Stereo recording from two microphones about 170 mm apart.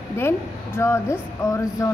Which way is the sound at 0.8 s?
15° left (ahead or behind).